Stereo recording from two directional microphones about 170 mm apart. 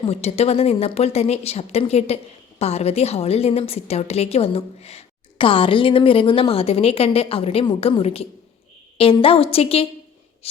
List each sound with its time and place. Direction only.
0.0 s a woman's voice: 40° left (ahead or behind)